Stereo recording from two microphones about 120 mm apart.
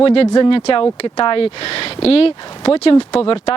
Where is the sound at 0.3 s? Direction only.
40° left (ahead or behind).